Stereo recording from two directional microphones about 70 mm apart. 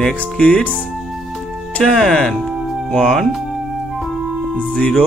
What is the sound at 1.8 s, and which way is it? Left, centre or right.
Speech, centre.